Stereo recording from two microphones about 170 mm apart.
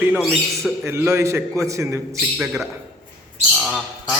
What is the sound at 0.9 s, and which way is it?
A man's voice, 15° right (ahead or behind).